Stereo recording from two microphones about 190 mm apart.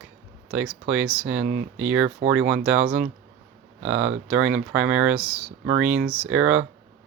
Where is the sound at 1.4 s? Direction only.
50° right (ahead or behind).